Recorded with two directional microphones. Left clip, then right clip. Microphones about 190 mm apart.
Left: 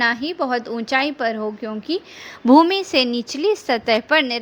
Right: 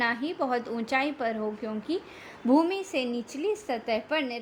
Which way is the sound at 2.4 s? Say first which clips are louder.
Left 11 dB; 35° left (ahead or behind).